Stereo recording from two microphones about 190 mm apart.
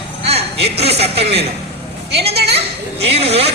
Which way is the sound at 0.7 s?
35° right (ahead or behind).